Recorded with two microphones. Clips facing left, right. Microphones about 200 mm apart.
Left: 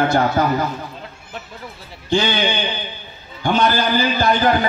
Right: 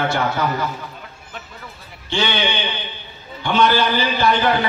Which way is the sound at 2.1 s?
40° left (ahead or behind).